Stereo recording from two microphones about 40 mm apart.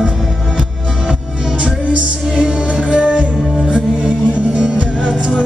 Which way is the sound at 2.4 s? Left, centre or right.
Right.